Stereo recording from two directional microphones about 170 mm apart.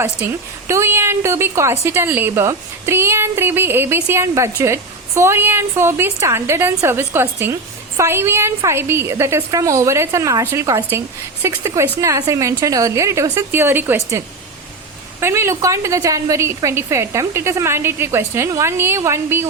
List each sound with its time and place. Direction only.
0.2 s a woman's voice: 15° right (ahead or behind)
15.2 s a woman's voice: 15° right (ahead or behind)